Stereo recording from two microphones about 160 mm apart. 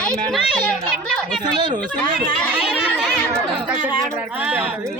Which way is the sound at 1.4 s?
25° right (ahead or behind).